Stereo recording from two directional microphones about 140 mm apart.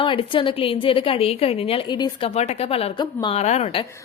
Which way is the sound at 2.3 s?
50° left (ahead or behind).